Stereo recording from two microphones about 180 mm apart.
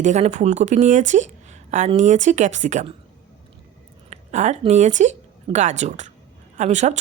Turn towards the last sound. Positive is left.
turn(degrees=-40)  # may be behind; listen again after turning